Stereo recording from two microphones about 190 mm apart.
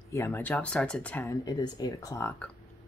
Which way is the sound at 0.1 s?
15° left (ahead or behind).